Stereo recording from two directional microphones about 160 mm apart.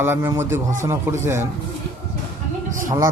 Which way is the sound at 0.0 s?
15° right (ahead or behind).